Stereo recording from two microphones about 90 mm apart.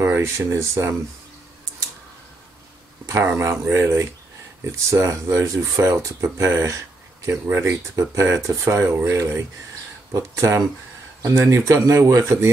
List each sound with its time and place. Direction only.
0.0 s speech: 30° right (ahead or behind)
3.3 s speech: 30° right (ahead or behind)